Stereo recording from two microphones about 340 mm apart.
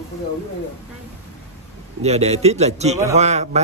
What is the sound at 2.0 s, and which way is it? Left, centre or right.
A man's voice, centre.